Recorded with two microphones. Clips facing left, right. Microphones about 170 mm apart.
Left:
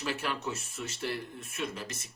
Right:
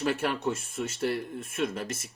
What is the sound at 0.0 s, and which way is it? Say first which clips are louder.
Speech: right 6 dB; 55° right (ahead or behind).